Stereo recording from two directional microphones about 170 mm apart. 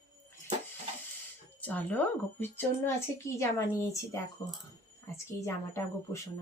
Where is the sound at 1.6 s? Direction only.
10° left (ahead or behind).